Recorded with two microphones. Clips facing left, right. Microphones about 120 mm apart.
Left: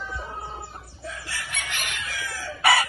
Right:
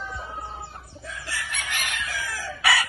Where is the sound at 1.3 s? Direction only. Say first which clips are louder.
Right 5 dB; centre (ahead or behind).